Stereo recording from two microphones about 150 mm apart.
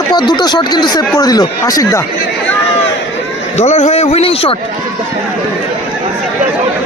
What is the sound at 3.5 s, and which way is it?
A man's voice, 50° left (ahead or behind).